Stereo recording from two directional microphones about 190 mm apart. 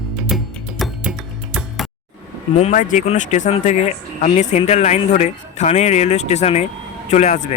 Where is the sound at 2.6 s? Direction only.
40° left (ahead or behind).